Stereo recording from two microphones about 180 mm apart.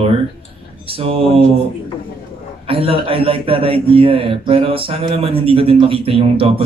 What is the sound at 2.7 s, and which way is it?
A man's voice, 30° right (ahead or behind).